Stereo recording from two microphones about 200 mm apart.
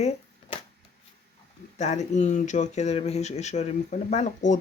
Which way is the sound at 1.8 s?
35° left (ahead or behind).